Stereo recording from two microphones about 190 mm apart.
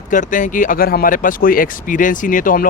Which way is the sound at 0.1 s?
45° left (ahead or behind).